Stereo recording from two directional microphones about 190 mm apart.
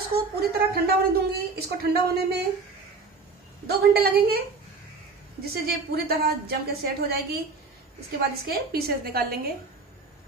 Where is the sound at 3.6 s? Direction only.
55° right (ahead or behind).